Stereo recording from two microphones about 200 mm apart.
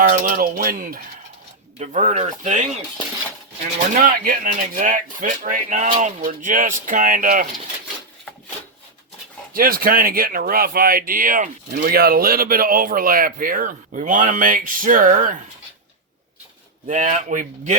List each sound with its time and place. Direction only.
0.1 s speech: 45° right (ahead or behind)
3.9 s speech: 40° right (ahead or behind)
9.5 s speech: 45° right (ahead or behind)
16.8 s speech: 40° right (ahead or behind)